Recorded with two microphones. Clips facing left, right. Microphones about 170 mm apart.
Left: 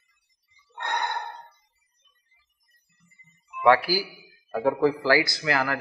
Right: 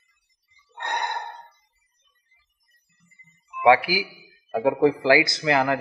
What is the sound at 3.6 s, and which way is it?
Speech, 15° right (ahead or behind).